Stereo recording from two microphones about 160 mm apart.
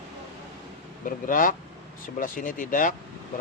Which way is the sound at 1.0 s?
55° left (ahead or behind).